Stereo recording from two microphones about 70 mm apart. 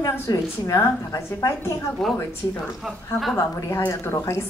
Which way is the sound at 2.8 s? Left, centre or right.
Centre.